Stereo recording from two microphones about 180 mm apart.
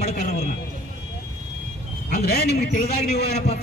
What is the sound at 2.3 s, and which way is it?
Speech, 65° left (ahead or behind).